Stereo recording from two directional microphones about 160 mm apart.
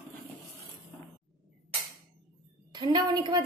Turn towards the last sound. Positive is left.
turn(degrees=-25)  # may be behind; listen again after turning